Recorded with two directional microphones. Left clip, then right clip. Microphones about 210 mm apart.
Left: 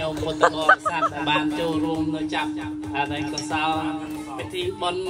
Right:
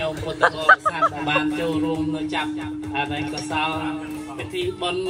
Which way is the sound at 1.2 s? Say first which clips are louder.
Right 1 dB; centre (ahead or behind).